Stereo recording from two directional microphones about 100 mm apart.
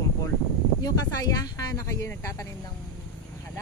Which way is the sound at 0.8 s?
40° left (ahead or behind).